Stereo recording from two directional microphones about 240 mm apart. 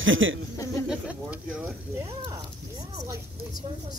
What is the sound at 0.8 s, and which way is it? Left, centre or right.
Speech, centre.